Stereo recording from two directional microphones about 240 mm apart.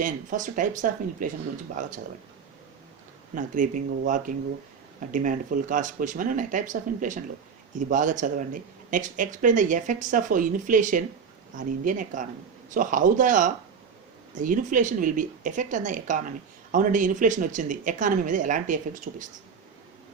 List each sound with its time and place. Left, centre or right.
0.0 s speech: right
3.3 s speech: right